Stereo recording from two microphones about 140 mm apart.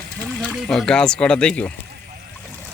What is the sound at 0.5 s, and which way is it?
Speech, centre (ahead or behind).